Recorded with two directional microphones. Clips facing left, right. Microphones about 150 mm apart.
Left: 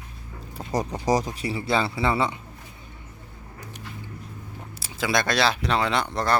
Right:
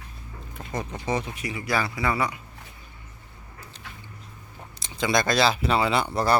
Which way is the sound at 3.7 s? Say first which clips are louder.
Left 3 dB; 10° left (ahead or behind).